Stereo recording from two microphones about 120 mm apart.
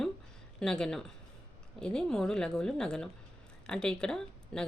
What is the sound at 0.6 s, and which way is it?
A woman's voice, 5° left (ahead or behind).